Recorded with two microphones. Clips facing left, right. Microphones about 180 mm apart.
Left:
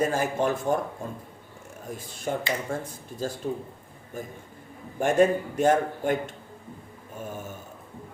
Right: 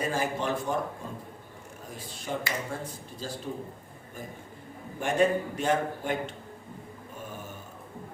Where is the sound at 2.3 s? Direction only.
50° left (ahead or behind).